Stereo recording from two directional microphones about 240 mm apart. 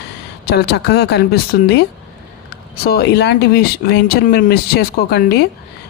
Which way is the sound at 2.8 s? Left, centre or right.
Left.